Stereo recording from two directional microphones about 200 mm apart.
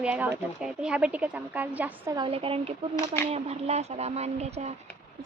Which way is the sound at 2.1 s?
25° right (ahead or behind).